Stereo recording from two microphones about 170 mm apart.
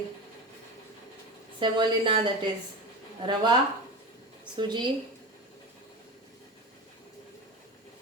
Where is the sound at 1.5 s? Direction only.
25° right (ahead or behind).